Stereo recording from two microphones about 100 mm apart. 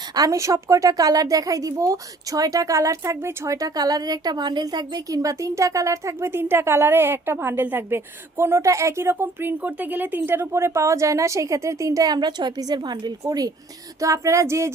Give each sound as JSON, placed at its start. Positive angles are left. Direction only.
{"t": 0.1, "sound": "a woman's voice", "side_deg": -35}